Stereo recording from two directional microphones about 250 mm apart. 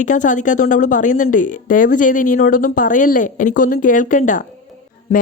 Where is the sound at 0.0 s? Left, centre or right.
Left.